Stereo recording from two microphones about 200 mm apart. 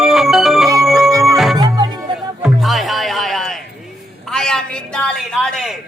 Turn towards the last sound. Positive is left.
turn(degrees=5)  # may be behind; listen again after turning